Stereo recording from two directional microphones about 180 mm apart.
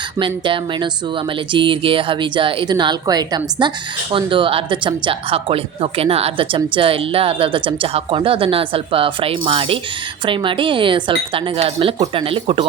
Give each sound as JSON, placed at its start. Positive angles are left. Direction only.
{"t": 0.2, "sound": "speech", "side_deg": -30}